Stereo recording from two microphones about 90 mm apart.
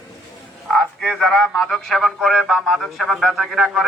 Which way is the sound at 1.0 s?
Centre (ahead or behind).